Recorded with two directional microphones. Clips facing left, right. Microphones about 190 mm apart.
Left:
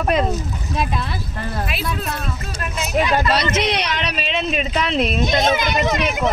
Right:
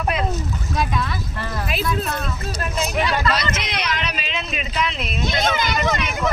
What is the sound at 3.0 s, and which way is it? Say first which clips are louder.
A man's voice: left 5 dB; 30° left (ahead or behind).